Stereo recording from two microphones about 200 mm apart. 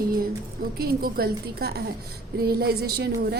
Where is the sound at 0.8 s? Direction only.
50° right (ahead or behind).